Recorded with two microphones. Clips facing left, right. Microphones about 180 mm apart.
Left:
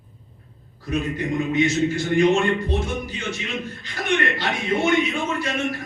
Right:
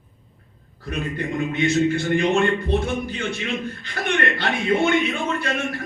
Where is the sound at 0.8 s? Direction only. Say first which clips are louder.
Left 2 dB; 60° right (ahead or behind).